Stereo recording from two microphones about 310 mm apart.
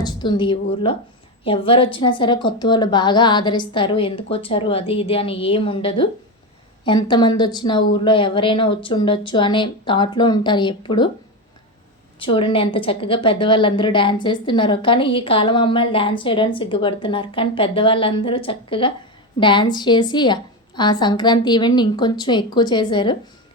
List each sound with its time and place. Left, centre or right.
0.0 s a woman's voice: centre
12.2 s a woman's voice: centre